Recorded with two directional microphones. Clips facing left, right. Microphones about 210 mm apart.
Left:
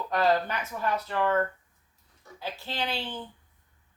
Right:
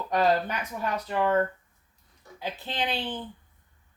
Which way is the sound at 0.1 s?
15° right (ahead or behind).